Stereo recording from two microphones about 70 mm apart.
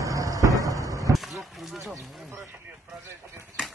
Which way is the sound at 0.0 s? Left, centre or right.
Right.